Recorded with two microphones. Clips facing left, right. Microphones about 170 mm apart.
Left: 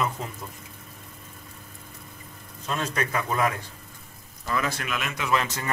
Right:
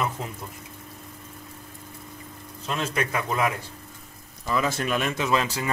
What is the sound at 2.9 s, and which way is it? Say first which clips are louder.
Speech: right 1 dB; 5° right (ahead or behind).